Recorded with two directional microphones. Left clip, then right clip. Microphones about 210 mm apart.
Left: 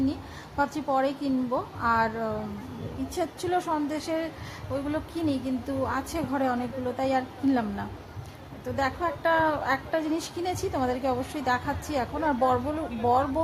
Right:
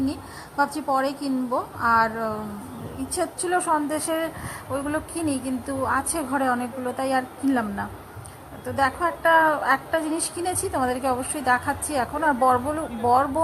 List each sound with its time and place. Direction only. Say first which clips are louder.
0.5 s a woman's voice: right 3 dB; 10° right (ahead or behind)